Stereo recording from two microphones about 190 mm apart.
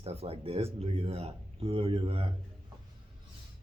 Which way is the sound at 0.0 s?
30° right (ahead or behind).